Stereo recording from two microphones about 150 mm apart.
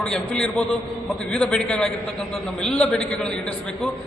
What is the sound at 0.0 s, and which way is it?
A man's voice, 5° left (ahead or behind).